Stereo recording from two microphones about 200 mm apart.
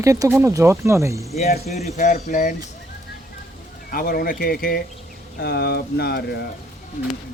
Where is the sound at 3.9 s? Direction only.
45° left (ahead or behind).